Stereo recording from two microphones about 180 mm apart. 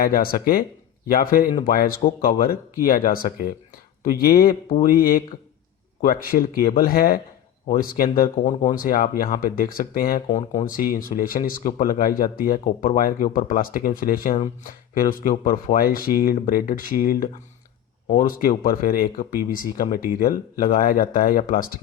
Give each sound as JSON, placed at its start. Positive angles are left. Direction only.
{"t": 0.0, "sound": "speech", "side_deg": 55}
{"t": 18.1, "sound": "speech", "side_deg": 40}
{"t": 18.4, "sound": "speech", "side_deg": 55}